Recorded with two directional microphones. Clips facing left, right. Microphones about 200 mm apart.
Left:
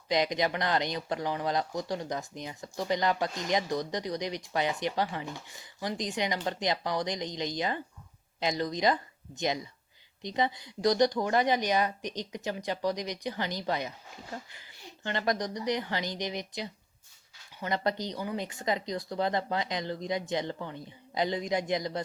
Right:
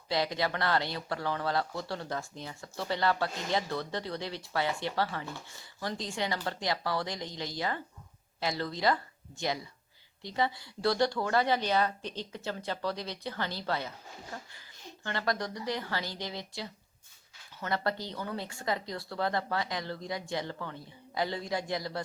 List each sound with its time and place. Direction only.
0.1 s speech: 20° left (ahead or behind)
15.0 s speech: 20° left (ahead or behind)